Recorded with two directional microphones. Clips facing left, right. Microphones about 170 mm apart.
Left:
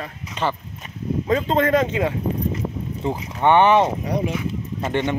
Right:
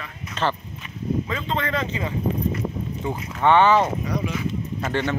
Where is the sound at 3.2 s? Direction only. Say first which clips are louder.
Left 1 dB; 20° left (ahead or behind).